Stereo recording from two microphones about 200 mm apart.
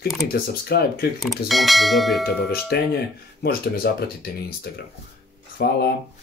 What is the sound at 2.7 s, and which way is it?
Speech, 55° left (ahead or behind).